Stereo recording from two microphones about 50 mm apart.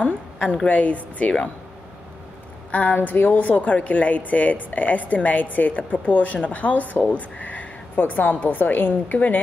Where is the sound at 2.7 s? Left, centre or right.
Left.